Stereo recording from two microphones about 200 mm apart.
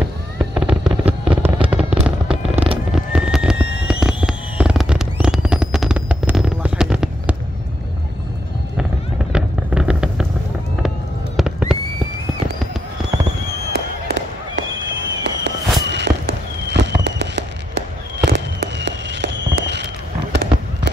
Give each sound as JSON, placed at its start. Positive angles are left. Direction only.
{"t": 0.6, "sound": "fireworks", "side_deg": -5}
{"t": 2.9, "sound": "neigh", "side_deg": -5}
{"t": 3.8, "sound": "fireworks", "side_deg": -5}
{"t": 9.3, "sound": "a sound", "side_deg": -5}
{"t": 11.3, "sound": "fireworks", "side_deg": 0}
{"t": 13.7, "sound": "fireworks", "side_deg": -55}